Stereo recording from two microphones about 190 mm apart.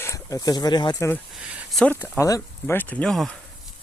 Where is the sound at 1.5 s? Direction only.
5° right (ahead or behind).